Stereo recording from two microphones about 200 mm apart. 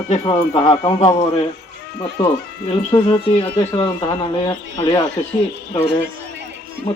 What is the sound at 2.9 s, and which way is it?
Speech, 20° left (ahead or behind).